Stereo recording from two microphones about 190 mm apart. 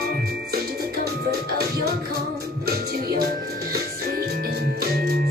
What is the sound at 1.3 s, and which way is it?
Music, 55° right (ahead or behind).